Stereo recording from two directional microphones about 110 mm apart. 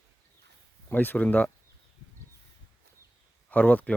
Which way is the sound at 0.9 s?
15° left (ahead or behind).